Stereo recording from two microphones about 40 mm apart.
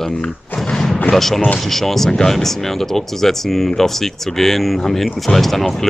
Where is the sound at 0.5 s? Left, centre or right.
Centre.